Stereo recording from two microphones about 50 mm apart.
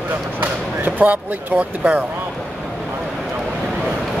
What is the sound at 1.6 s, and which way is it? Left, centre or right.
Speech, right.